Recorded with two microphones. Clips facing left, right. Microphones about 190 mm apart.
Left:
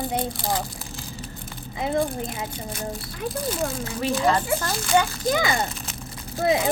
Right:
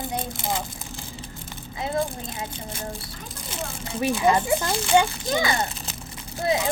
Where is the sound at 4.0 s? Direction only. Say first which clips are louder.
Right 1 dB; 15° right (ahead or behind).